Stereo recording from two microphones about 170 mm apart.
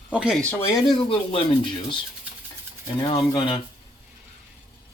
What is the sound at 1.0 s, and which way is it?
Speech, 30° left (ahead or behind).